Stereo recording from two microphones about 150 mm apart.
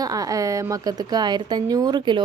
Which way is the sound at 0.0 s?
25° right (ahead or behind).